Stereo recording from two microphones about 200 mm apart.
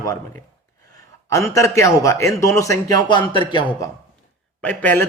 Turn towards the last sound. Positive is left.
turn(degrees=5)  # may be behind; listen again after turning